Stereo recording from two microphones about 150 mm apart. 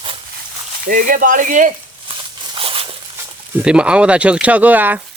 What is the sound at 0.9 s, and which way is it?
Speech, 65° right (ahead or behind).